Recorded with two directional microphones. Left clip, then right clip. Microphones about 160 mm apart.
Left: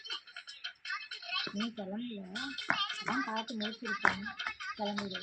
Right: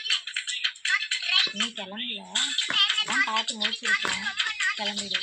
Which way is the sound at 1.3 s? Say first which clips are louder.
Right 13 dB; 40° left (ahead or behind).